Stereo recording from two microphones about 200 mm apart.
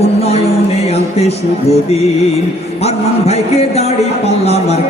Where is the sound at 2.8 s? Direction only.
30° left (ahead or behind).